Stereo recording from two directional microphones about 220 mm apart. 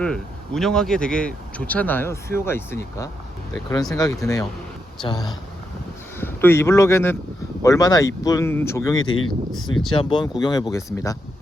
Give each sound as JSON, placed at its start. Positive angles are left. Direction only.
{"t": 0.0, "sound": "speech", "side_deg": 0}
{"t": 9.0, "sound": "speech", "side_deg": 70}
{"t": 9.9, "sound": "speech", "side_deg": 25}